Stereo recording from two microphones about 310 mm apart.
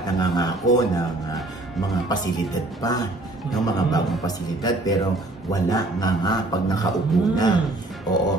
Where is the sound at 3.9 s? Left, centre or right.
Centre.